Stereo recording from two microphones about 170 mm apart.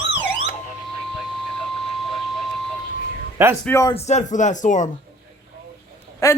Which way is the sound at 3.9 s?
45° left (ahead or behind).